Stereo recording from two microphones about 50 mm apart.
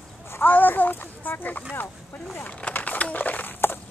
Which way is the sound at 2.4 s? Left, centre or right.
Left.